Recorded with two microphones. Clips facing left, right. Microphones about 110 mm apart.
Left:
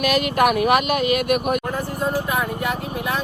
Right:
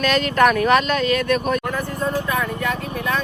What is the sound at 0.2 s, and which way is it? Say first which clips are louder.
Speech: right 3 dB; 15° left (ahead or behind).